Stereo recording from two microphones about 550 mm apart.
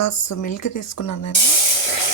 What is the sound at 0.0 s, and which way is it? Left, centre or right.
Speech, left.